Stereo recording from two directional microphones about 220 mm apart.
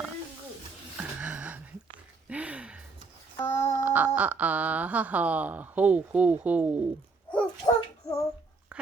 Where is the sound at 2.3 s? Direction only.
5° right (ahead or behind).